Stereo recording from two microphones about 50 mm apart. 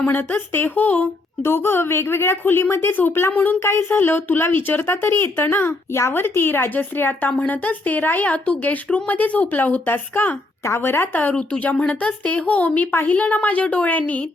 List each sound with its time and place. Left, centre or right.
0.0 s a woman's voice: left
1.4 s a woman's voice: left
3.3 s a woman's voice: left
3.6 s speech: left
5.9 s a woman's voice: left
10.6 s speech: left
10.8 s a woman's voice: left